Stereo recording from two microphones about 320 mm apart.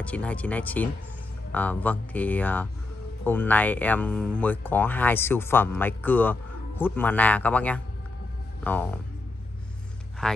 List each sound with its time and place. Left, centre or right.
0.0 s speech: centre
10.2 s speech: centre